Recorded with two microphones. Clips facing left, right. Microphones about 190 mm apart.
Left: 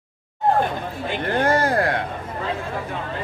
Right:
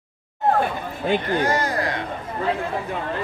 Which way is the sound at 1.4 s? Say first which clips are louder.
Left 3 dB; 55° left (ahead or behind).